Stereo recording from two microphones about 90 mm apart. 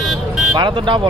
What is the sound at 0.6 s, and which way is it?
Speech, 55° right (ahead or behind).